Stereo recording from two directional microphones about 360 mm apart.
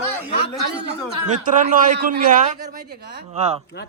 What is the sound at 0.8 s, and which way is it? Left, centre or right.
A man's voice, right.